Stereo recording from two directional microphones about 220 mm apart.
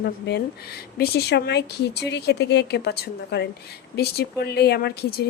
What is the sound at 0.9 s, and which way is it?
Speech, 45° left (ahead or behind).